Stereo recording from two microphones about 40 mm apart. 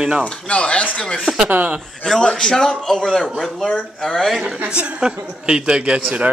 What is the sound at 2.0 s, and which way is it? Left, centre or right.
A man's voice, centre.